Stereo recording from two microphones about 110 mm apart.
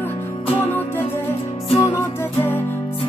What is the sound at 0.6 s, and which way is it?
Music, 20° left (ahead or behind).